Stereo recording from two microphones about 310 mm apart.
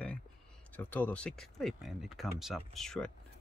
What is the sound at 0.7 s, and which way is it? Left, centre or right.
Speech, centre.